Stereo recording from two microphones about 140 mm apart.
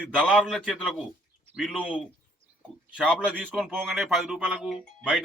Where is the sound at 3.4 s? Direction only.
5° left (ahead or behind).